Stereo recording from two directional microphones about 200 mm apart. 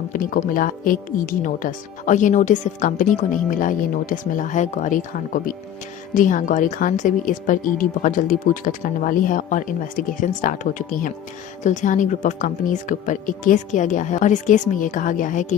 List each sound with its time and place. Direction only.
0.1 s a woman's voice: 45° left (ahead or behind)